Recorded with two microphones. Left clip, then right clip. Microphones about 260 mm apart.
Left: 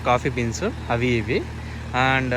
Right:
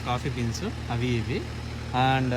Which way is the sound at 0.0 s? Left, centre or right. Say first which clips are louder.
Left 9 dB; centre.